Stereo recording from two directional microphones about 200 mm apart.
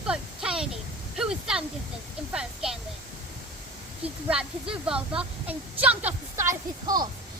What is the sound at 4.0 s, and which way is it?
A woman's voice, 5° right (ahead or behind).